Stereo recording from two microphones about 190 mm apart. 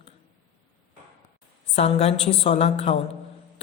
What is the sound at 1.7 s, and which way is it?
A woman's voice, 35° left (ahead or behind).